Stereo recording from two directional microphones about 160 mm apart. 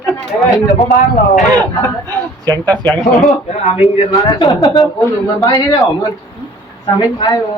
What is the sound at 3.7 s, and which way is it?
Speech, 40° left (ahead or behind).